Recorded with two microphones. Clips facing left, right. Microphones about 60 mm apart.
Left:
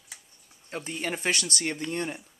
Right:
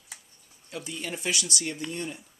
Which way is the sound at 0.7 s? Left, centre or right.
Left.